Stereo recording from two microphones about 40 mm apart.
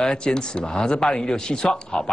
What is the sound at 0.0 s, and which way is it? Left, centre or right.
A man's voice, left.